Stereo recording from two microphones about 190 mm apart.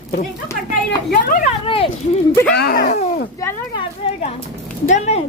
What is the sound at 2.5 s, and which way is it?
Speech, 50° left (ahead or behind).